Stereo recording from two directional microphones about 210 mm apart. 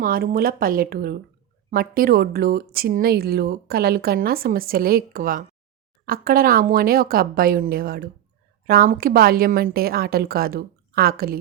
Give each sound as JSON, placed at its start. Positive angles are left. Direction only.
{"t": 0.0, "sound": "speech", "side_deg": -45}